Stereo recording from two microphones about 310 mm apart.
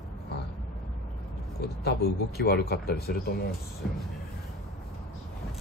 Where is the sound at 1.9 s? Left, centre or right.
Left.